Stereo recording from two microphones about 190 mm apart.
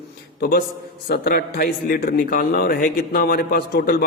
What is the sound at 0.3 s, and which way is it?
A man's voice, 50° left (ahead or behind).